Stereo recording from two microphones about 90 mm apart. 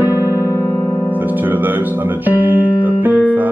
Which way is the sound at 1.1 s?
20° right (ahead or behind).